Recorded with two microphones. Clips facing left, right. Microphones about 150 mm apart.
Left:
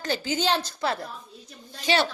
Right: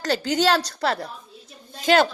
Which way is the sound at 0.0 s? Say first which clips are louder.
Right 5 dB; 85° right.